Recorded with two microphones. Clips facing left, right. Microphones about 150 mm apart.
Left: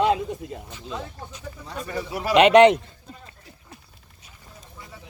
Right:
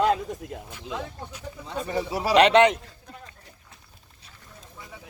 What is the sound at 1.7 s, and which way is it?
Speech, 20° right (ahead or behind).